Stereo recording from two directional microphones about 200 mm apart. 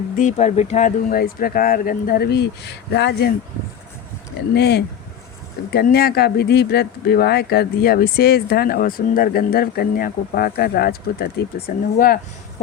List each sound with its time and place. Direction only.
0.2 s speech: 35° left (ahead or behind); by 3.3 s 55° left (ahead or behind)
4.5 s speech: 55° left (ahead or behind)